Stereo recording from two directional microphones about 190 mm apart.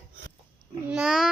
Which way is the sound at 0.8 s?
5° right (ahead or behind).